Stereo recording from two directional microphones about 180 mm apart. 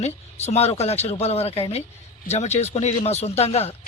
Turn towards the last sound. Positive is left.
turn(degrees=35)  # may be behind; listen again after turning